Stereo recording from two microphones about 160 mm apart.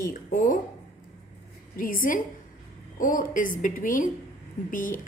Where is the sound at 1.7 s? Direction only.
60° left (ahead or behind).